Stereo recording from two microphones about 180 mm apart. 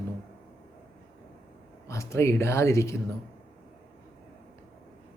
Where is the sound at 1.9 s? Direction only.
15° left (ahead or behind).